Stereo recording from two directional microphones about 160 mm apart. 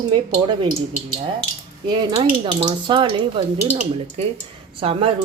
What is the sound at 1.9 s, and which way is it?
Speech, 30° right (ahead or behind).